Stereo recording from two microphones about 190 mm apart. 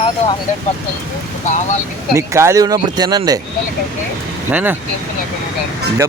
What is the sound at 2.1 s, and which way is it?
Speech, 15° right (ahead or behind).